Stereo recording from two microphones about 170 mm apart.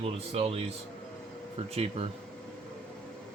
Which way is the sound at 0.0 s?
35° right (ahead or behind).